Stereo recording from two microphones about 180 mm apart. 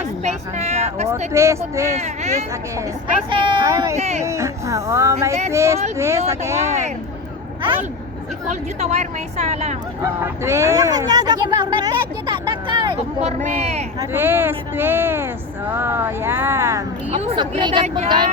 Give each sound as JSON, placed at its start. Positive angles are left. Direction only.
{"t": 0.2, "sound": "speech", "side_deg": -40}
{"t": 1.3, "sound": "speech", "side_deg": -15}
{"t": 2.0, "sound": "a woman's voice", "side_deg": -40}
{"t": 2.5, "sound": "speech", "side_deg": -15}
{"t": 3.9, "sound": "speech", "side_deg": -40}
{"t": 4.2, "sound": "speech", "side_deg": -15}
{"t": 8.4, "sound": "a woman's voice", "side_deg": -40}
{"t": 10.0, "sound": "speech", "side_deg": -15}
{"t": 14.0, "sound": "speech", "side_deg": -15}
{"t": 17.1, "sound": "speech", "side_deg": -35}